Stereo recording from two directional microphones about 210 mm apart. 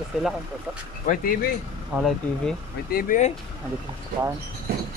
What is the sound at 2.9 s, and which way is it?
Speech, 40° left (ahead or behind).